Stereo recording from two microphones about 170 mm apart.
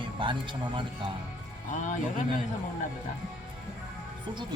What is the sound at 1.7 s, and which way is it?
Speech, 45° left (ahead or behind).